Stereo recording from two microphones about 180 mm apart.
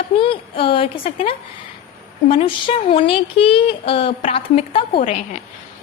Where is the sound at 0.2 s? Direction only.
30° left (ahead or behind).